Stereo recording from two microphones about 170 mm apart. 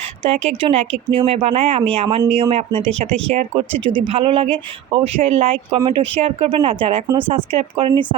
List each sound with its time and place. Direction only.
0.2 s speech: 35° right (ahead or behind)
3.8 s speech: 30° right (ahead or behind)